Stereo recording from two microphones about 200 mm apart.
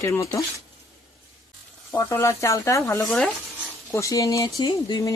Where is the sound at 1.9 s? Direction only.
15° left (ahead or behind).